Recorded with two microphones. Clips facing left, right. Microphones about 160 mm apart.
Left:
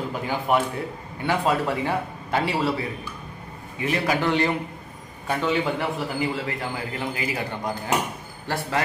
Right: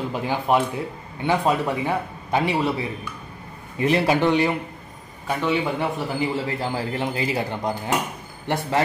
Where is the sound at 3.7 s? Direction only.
30° right (ahead or behind).